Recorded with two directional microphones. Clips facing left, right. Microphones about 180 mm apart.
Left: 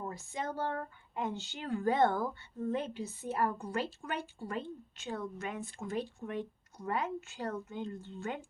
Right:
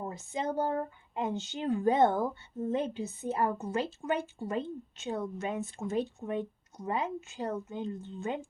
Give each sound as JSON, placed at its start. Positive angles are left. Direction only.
{"t": 0.0, "sound": "speech", "side_deg": -20}